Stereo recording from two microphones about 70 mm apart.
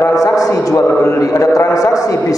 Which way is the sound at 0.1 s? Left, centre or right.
Left.